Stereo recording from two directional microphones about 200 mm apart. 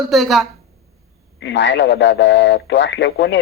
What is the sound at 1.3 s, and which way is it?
A man's voice, 65° left (ahead or behind).